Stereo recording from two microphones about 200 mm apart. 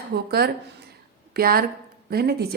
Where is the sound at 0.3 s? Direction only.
50° right (ahead or behind).